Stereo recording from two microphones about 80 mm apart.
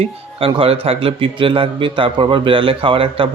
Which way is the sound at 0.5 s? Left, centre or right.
Right.